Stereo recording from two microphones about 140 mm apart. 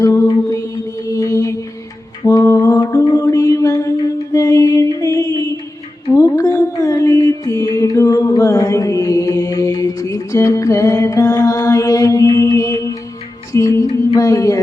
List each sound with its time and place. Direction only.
0.0 s music: 25° left (ahead or behind)
2.2 s mantra: 20° left (ahead or behind)
13.5 s music: 20° left (ahead or behind)